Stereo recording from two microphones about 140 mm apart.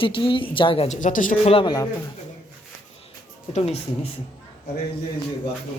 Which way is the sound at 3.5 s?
50° left (ahead or behind).